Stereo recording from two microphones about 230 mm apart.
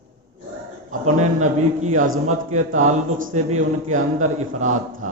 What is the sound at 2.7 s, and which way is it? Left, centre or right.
Speech, right.